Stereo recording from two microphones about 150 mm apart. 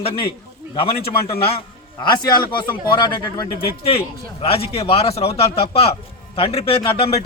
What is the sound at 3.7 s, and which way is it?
Speech, 40° left (ahead or behind).